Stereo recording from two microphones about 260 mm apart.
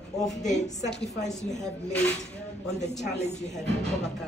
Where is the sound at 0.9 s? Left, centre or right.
Left.